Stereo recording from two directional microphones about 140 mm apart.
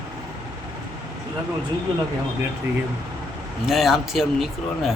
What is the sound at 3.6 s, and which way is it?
Speech, centre (ahead or behind).